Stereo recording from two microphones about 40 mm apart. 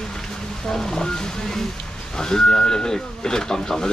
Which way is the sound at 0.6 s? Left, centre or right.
Centre.